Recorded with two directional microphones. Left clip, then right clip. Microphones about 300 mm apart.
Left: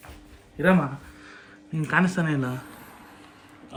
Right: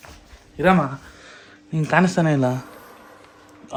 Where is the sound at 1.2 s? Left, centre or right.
Centre.